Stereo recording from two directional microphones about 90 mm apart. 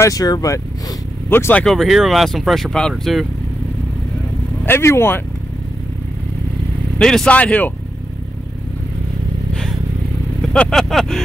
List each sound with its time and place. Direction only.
0.0 s speech: 45° left (ahead or behind)
1.3 s speech: 20° left (ahead or behind)
1.7 s speech: centre (ahead or behind)
4.6 s speech: 30° left (ahead or behind)
7.0 s speech: 5° left (ahead or behind)
9.5 s vehicle: 5° left (ahead or behind)
10.4 s speech: 5° left (ahead or behind)